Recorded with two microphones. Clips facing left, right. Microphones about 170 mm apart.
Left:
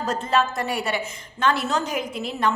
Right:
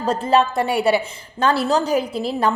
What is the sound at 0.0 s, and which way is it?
A woman's voice, 30° right (ahead or behind).